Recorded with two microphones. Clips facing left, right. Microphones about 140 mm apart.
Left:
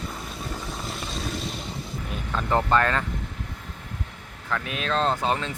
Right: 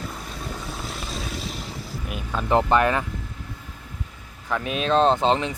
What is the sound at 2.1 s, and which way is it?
Speech, 10° right (ahead or behind).